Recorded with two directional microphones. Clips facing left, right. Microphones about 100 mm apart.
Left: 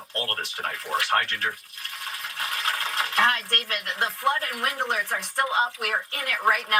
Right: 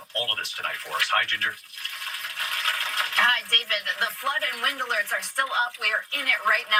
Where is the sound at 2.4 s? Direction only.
35° left (ahead or behind).